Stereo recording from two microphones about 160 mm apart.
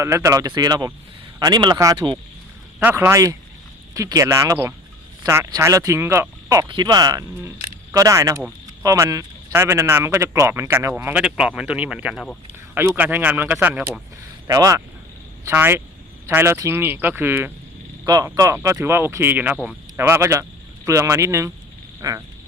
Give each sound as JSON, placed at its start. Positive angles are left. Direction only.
{"t": 0.0, "sound": "speech", "side_deg": -20}
{"t": 14.4, "sound": "speech", "side_deg": -20}